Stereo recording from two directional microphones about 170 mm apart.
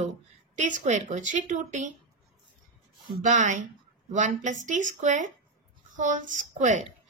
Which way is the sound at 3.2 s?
45° right (ahead or behind).